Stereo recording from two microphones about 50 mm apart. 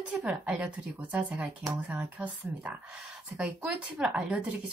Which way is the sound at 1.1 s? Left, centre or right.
Right.